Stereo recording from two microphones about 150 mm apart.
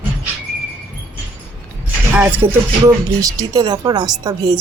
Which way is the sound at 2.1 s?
10° right (ahead or behind).